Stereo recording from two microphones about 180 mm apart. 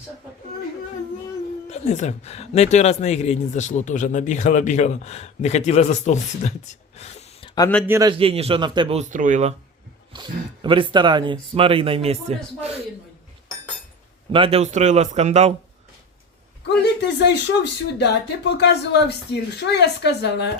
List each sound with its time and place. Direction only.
1.7 s speech: 40° left (ahead or behind)
7.9 s a man's voice: 15° right (ahead or behind)
8.1 s speech: 30° right (ahead or behind)
10.1 s speech: 25° right (ahead or behind)
14.3 s speech: 30° right (ahead or behind)
17.2 s speech: 70° left (ahead or behind)